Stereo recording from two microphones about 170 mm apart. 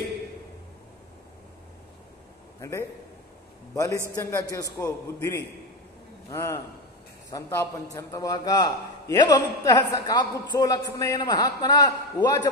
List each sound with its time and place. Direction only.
3.7 s a man's voice: 20° left (ahead or behind)